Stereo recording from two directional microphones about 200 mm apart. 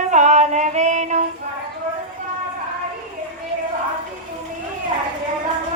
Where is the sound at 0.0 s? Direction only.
35° right (ahead or behind).